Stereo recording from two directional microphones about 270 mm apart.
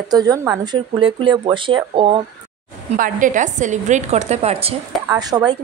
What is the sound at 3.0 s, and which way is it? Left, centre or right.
A woman's voice, right.